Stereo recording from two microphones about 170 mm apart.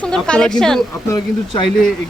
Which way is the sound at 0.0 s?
5° left (ahead or behind).